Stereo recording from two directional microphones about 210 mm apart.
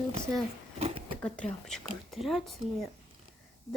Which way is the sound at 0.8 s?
30° right (ahead or behind).